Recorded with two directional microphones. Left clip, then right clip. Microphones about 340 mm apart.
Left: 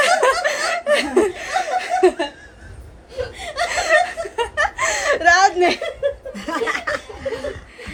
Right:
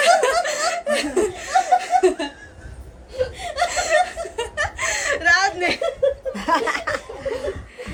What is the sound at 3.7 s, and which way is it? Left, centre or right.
Chuckle, left.